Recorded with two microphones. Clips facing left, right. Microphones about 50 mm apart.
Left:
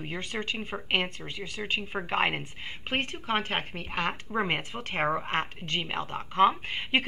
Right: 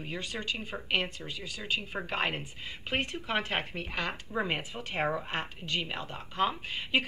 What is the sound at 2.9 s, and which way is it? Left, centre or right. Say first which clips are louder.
Speech: left 2 dB; left.